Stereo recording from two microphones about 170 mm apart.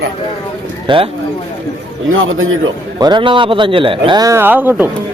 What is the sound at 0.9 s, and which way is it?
Speech, 30° right (ahead or behind).